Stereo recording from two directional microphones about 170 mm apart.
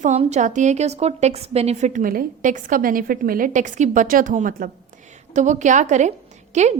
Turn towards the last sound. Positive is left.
turn(degrees=-40)  # may be behind; listen again after turning